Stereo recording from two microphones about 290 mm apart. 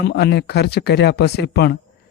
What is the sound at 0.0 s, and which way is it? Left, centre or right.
Speech, left.